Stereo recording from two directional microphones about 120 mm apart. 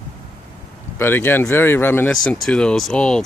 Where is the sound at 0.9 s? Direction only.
20° left (ahead or behind).